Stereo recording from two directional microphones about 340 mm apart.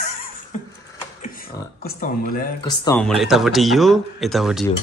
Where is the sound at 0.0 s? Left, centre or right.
Left.